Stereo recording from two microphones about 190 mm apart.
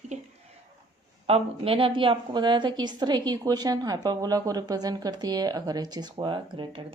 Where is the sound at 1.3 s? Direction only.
30° right (ahead or behind).